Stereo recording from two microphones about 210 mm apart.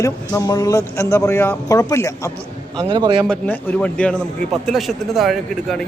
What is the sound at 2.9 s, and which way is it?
Speech, 20° right (ahead or behind).